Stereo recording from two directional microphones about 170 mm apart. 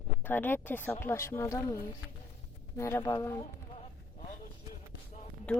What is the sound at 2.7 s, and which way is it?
Speech, 15° left (ahead or behind).